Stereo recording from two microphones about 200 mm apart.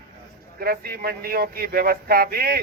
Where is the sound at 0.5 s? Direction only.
50° right (ahead or behind).